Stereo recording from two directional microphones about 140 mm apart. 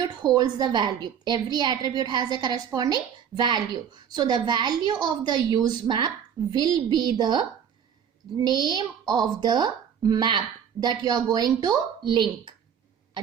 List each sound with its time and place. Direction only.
0.3 s a woman's voice: 30° right (ahead or behind)